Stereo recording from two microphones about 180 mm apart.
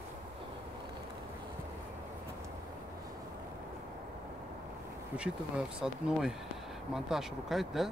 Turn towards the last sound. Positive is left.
turn(degrees=0)  # may be behind; listen again after turning